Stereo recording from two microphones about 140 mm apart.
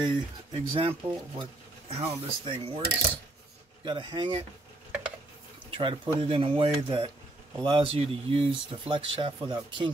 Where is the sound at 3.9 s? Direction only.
35° right (ahead or behind).